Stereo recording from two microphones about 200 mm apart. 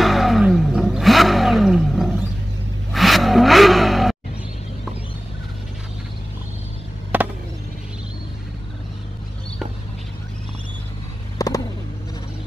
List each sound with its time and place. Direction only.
0.0 s vehicle: centre (ahead or behind)
2.9 s car: centre (ahead or behind)
7.1 s chop: 10° right (ahead or behind)
11.3 s a sound: 15° left (ahead or behind)